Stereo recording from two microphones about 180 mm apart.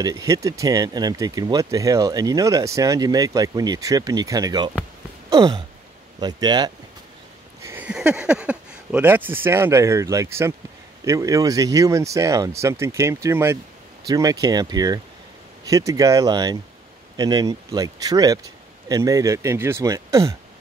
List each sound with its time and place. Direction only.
0.0 s speech: 20° right (ahead or behind)
5.3 s a sound: 25° right (ahead or behind)
6.1 s speech: 20° right (ahead or behind)
7.6 s speech: 10° right (ahead or behind)